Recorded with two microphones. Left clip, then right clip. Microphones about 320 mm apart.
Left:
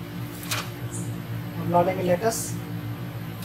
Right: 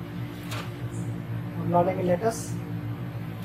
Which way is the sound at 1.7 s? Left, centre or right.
Centre.